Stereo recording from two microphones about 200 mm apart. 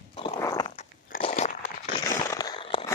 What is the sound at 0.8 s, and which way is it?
Crunch, 35° left (ahead or behind).